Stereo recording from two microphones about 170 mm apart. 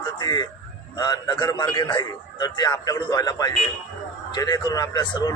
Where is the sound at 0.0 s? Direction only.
25° left (ahead or behind).